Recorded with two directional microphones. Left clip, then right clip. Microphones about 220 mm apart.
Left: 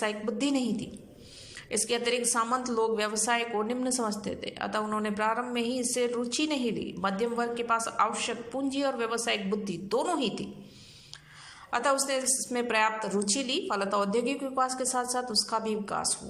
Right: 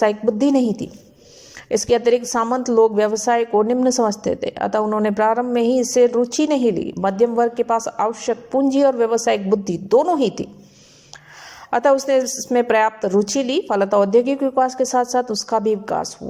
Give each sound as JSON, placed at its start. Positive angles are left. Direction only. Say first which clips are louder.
{"t": 0.0, "sound": "a woman's voice", "louder": "right 13 dB", "side_deg": -35}
{"t": 11.7, "sound": "a woman's voice", "louder": "right 12 dB", "side_deg": -35}